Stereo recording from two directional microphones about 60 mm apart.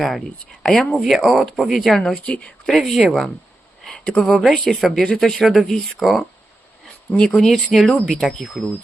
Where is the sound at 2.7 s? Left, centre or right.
Centre.